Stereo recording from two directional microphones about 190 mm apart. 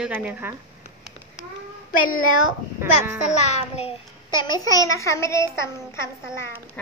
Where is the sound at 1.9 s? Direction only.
45° left (ahead or behind).